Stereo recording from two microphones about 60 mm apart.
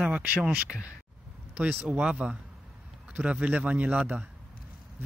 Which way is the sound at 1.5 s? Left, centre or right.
Right.